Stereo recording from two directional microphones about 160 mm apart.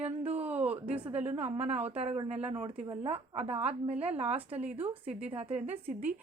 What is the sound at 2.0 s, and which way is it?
Speech, 40° right (ahead or behind).